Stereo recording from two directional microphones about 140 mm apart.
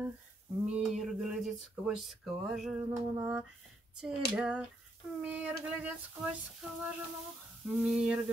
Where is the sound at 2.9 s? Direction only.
15° right (ahead or behind).